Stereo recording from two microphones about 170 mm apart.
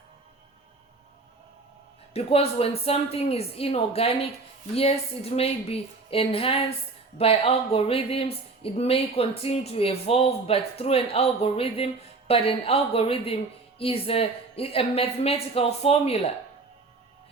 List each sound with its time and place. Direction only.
2.1 s speech: 35° left (ahead or behind)